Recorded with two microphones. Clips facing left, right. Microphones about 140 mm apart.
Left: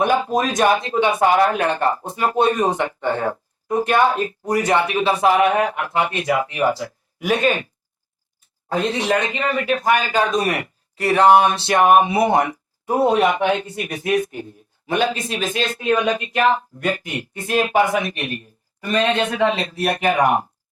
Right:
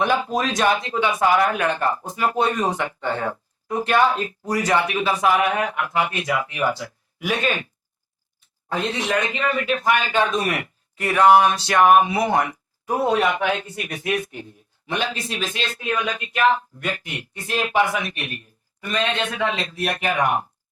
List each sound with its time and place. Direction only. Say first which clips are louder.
0.0 s speech: left 3 dB; 45° left (ahead or behind); by 3.2 s 20° left (ahead or behind)
3.2 s a sound: left 4 dB; 45° left (ahead or behind)
4.0 s speech: left 2 dB; 40° left (ahead or behind)
4.6 s speech: left 2 dB; 25° left (ahead or behind)